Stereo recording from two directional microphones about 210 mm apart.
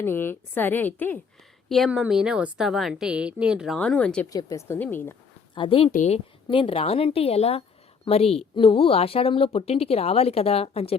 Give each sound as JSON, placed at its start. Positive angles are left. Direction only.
{"t": 0.0, "sound": "a woman's voice", "side_deg": 10}
{"t": 4.3, "sound": "speech", "side_deg": 15}
{"t": 5.5, "sound": "speech", "side_deg": 25}